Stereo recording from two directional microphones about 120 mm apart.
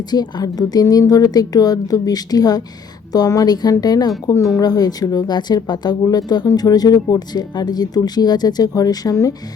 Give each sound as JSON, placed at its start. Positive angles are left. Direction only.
{"t": 0.1, "sound": "speech", "side_deg": 35}